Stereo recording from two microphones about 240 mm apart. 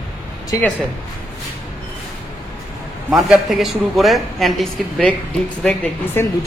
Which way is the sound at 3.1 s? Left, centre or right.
Centre.